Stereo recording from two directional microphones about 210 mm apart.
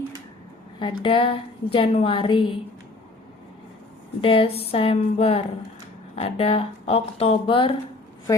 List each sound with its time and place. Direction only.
0.8 s a woman's voice: 25° left (ahead or behind)
4.2 s a woman's voice: 25° left (ahead or behind)